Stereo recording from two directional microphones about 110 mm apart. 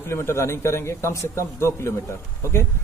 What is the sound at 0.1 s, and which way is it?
A man's voice, 25° left (ahead or behind).